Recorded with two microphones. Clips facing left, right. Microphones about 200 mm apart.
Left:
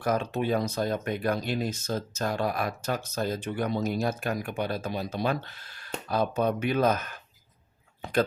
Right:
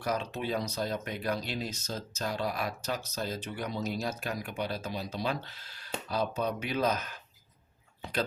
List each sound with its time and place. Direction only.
0.0 s speech: 50° left (ahead or behind)